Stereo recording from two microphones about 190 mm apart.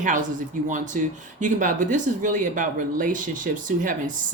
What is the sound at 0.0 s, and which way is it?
A man's voice, 45° right (ahead or behind).